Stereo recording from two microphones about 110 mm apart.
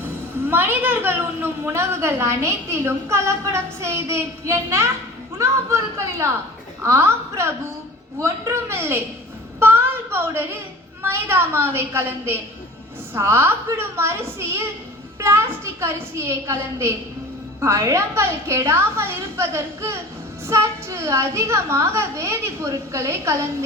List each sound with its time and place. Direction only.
0.0 s a woman's voice: 20° right (ahead or behind)
9.6 s a sound: 20° right (ahead or behind)
11.0 s a woman's voice: 20° right (ahead or behind)